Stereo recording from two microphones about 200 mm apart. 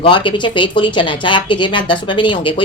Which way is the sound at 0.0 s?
25° left (ahead or behind).